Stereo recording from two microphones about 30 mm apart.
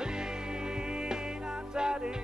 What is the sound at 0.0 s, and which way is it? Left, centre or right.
Music, right.